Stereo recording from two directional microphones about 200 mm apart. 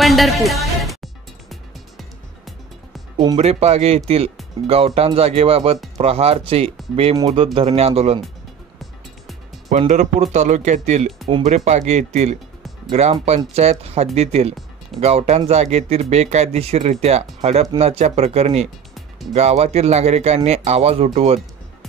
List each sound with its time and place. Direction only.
0.0 s music: centre (ahead or behind)
3.2 s speech: 25° right (ahead or behind)
7.2 s speech: 20° right (ahead or behind)
7.5 s speech: 30° right (ahead or behind)
9.7 s speech: 35° right (ahead or behind)